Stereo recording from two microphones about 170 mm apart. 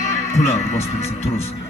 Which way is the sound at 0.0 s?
45° left (ahead or behind).